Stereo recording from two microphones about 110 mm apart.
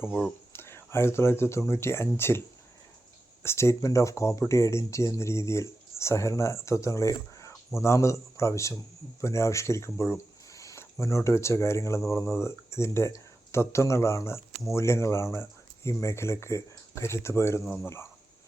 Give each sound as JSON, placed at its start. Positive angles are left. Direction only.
{"t": 0.5, "sound": "speech", "side_deg": 20}
{"t": 3.4, "sound": "speech", "side_deg": 25}